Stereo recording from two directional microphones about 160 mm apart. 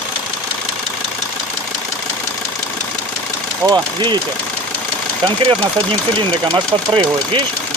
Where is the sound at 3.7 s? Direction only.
30° right (ahead or behind).